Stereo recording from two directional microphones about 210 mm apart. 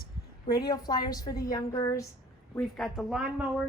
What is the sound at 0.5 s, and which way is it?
A woman's voice, 20° left (ahead or behind).